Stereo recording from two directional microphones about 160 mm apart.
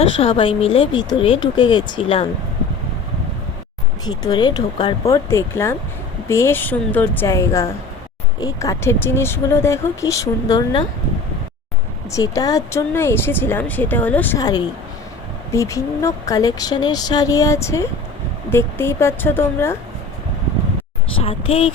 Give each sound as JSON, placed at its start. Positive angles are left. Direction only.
{"t": 0.2, "sound": "speech", "side_deg": 35}
{"t": 4.0, "sound": "speech", "side_deg": 25}
{"t": 12.1, "sound": "speech", "side_deg": 20}
{"t": 14.3, "sound": "speech", "side_deg": 25}
{"t": 21.2, "sound": "speech", "side_deg": 35}